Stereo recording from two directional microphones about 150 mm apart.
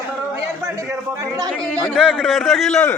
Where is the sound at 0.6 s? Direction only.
20° right (ahead or behind).